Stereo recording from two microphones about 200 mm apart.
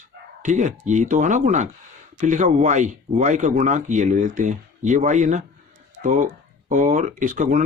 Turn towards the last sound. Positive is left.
turn(degrees=-40)  # may be behind; listen again after turning